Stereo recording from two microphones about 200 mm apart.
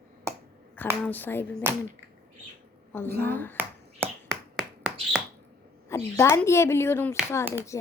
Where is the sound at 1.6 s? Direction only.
10° right (ahead or behind).